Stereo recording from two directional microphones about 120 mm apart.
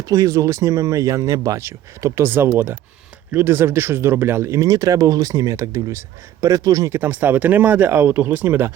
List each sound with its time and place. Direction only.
0.0 s speech: 30° right (ahead or behind)